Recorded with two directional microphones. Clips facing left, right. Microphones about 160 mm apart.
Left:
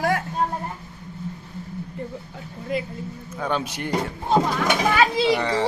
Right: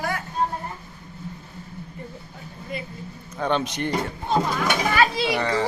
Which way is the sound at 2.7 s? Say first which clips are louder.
Left 7 dB; 90° left.